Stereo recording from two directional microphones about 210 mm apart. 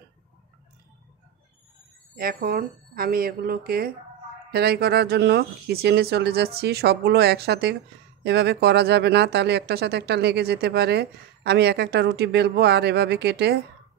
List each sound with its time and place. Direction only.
2.1 s speech: 45° right (ahead or behind)